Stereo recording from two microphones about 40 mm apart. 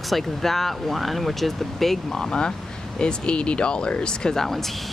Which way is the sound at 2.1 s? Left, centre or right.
Centre.